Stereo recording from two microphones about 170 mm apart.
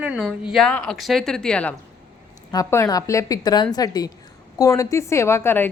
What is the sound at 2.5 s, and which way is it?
A woman's voice, 20° left (ahead or behind).